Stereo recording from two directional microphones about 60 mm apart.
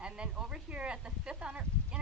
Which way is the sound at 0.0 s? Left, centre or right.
Centre.